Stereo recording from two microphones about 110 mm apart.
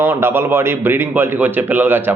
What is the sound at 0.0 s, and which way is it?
A man's voice, 20° right (ahead or behind).